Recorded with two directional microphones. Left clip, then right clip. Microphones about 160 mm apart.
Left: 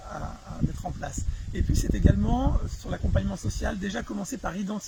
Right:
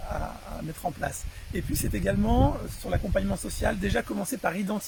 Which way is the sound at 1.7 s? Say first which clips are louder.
Even; 10° right (ahead or behind).